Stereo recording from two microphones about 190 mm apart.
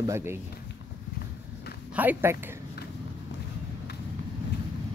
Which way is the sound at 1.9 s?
10° right (ahead or behind).